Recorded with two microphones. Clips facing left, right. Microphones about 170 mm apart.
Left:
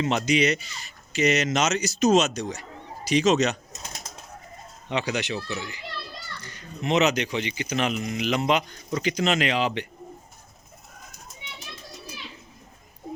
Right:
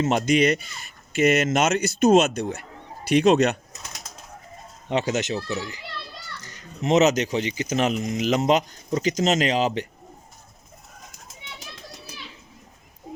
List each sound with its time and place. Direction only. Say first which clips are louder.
0.0 s speech: right 3 dB; 45° right (ahead or behind)
4.9 s speech: right 4 dB; 45° right (ahead or behind)